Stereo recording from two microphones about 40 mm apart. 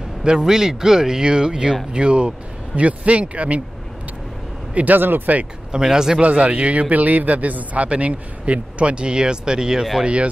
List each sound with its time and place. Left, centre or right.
0.2 s a man's voice: centre; by 3.6 s right
4.9 s speech: right
5.7 s speech: centre
6.1 s a man's voice: right; by 9.8 s centre